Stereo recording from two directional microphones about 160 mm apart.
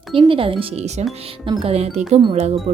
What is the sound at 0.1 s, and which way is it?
Speech, 35° right (ahead or behind).